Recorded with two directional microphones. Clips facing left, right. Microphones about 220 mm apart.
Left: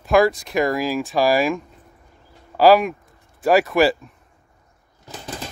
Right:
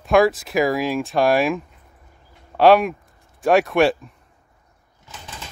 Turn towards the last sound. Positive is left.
turn(degrees=40)  # may be behind; listen again after turning